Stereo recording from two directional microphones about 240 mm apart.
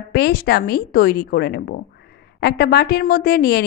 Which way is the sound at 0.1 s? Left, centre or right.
Left.